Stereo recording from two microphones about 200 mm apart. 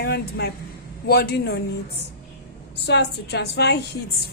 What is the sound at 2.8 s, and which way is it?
Speech, 60° left (ahead or behind).